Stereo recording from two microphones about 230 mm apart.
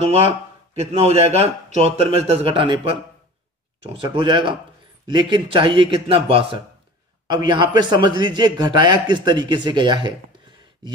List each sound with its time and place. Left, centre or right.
0.7 s a man's voice: right